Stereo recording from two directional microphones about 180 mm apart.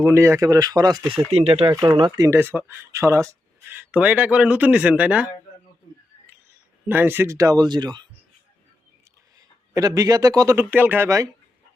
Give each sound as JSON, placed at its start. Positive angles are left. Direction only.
{"t": 0.0, "sound": "speech", "side_deg": -15}
{"t": 1.3, "sound": "speech", "side_deg": -35}
{"t": 1.7, "sound": "speech", "side_deg": -20}
{"t": 6.8, "sound": "speech", "side_deg": -10}
{"t": 9.7, "sound": "speech", "side_deg": -20}